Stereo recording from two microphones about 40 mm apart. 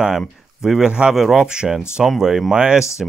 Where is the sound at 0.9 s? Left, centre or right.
Right.